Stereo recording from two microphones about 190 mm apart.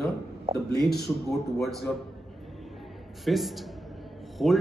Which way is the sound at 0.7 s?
55° left (ahead or behind).